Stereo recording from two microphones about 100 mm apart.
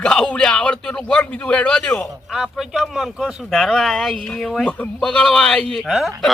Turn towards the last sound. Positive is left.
turn(degrees=0)  # may be behind; listen again after turning